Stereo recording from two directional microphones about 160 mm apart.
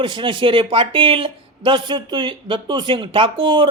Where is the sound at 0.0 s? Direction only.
30° right (ahead or behind).